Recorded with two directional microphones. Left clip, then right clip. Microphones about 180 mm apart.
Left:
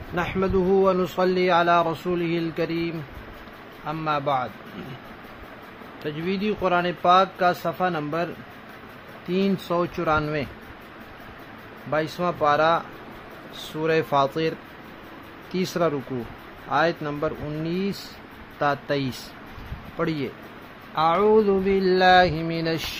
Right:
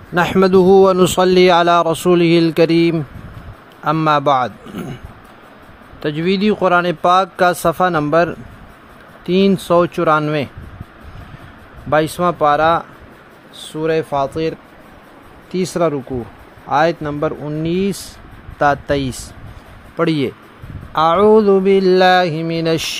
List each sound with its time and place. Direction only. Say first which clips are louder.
0.1 s a man's voice: right 12 dB; 55° right (ahead or behind)
6.0 s a man's voice: right 10 dB; 70° right (ahead or behind)
9.3 s mantra: right 11 dB; 50° right (ahead or behind)
11.9 s speech: right 10 dB; 45° right (ahead or behind); by 14.5 s 15° right (ahead or behind)
15.5 s speech: right 7 dB; 30° right (ahead or behind)
20.0 s mantra: right 10 dB; 50° right (ahead or behind)